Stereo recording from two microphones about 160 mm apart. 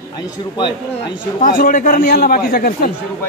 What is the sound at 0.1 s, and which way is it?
A man's voice, 30° left (ahead or behind).